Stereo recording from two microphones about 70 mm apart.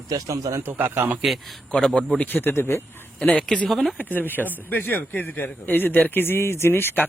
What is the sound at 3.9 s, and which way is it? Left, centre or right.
A man's voice, left.